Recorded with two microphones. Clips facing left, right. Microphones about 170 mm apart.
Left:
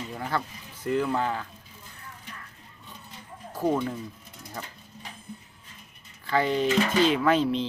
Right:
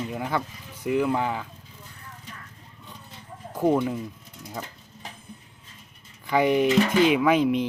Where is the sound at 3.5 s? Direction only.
20° right (ahead or behind).